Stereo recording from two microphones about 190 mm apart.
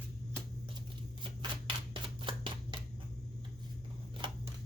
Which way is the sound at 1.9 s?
25° right (ahead or behind).